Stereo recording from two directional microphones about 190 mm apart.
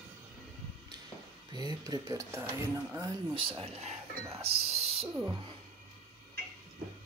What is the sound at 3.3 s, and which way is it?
Speech, 25° right (ahead or behind).